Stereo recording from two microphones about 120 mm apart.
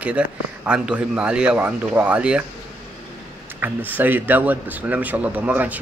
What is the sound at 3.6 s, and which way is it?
A man's voice, 15° right (ahead or behind).